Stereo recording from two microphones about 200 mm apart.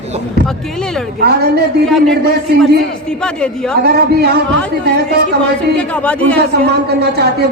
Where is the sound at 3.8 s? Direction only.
55° right (ahead or behind).